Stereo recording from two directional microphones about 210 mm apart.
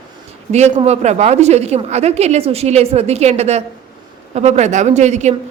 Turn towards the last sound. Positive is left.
turn(degrees=-35)  # may be behind; listen again after turning